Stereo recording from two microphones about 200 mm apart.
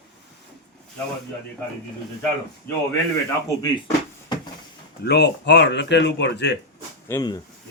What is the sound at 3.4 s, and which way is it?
Speech, 20° left (ahead or behind).